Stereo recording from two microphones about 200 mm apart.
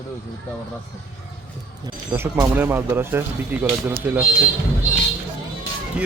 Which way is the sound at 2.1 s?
10° right (ahead or behind).